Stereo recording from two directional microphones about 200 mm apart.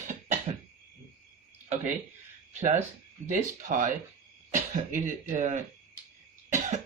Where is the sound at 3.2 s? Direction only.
40° right (ahead or behind).